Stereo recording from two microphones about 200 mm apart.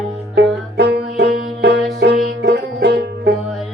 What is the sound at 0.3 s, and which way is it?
Music, 55° right (ahead or behind).